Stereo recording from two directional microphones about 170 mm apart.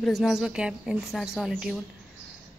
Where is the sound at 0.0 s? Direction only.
Centre (ahead or behind).